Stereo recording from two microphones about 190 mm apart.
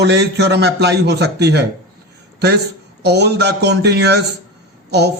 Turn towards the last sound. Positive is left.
turn(degrees=-60)  # may be behind; listen again after turning